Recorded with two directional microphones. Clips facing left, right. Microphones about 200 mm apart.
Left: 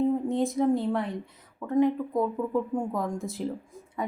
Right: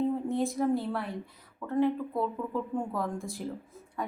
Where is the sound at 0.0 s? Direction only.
20° left (ahead or behind).